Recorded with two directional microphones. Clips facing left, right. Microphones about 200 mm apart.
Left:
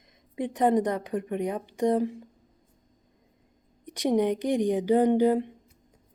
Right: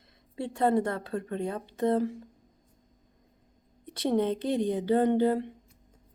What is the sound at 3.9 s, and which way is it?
Speech, 15° left (ahead or behind).